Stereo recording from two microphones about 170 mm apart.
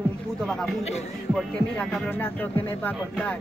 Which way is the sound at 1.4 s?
5° left (ahead or behind).